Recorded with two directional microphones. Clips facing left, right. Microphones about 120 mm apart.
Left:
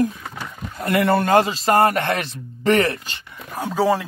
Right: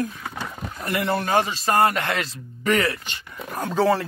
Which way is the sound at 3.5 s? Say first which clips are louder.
Left 1 dB; 10° left (ahead or behind).